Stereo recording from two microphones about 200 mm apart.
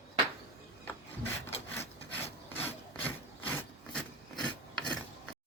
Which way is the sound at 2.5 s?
10° left (ahead or behind).